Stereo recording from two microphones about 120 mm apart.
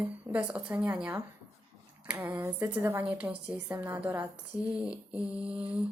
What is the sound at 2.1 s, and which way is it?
A woman's voice, 15° right (ahead or behind).